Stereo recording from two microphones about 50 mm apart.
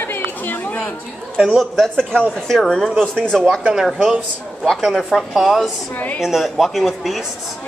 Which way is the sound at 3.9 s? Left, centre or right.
Centre.